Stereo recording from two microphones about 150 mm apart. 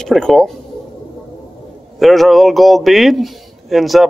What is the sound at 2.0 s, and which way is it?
A man's voice, centre (ahead or behind).